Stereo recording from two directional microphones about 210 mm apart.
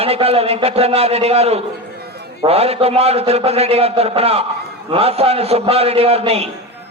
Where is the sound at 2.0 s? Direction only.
50° right (ahead or behind).